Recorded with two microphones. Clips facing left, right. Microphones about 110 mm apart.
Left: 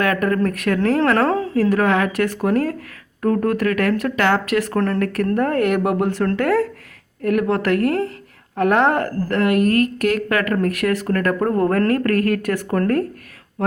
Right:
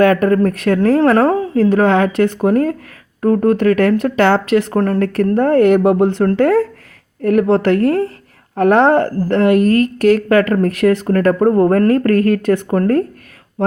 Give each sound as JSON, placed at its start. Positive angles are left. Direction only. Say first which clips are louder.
{"t": 0.0, "sound": "a woman's voice", "louder": "right 7 dB", "side_deg": -30}
{"t": 1.1, "sound": "a woman's voice", "louder": "right 5 dB", "side_deg": -20}